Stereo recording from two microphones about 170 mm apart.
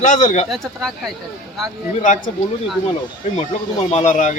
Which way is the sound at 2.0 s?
50° left (ahead or behind).